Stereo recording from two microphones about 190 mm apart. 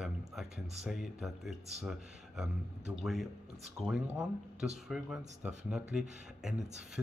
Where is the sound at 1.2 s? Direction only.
Centre (ahead or behind).